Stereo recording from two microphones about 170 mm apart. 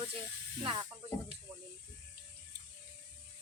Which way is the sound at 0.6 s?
25° right (ahead or behind).